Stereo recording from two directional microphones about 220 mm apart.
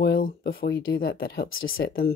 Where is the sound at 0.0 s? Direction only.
45° left (ahead or behind).